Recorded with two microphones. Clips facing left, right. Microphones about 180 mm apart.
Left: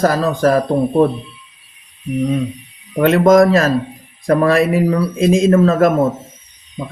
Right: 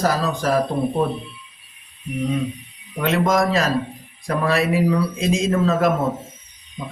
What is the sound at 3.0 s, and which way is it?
Speech, 50° left (ahead or behind).